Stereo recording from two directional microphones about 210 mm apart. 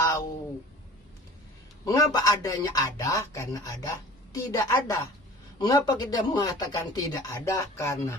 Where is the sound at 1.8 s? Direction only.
15° left (ahead or behind).